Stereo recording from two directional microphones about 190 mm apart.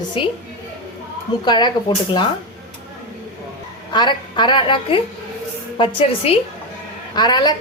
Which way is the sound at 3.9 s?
25° left (ahead or behind).